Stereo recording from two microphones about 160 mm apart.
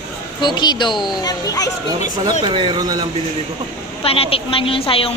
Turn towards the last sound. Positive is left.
turn(degrees=35)  # may be behind; listen again after turning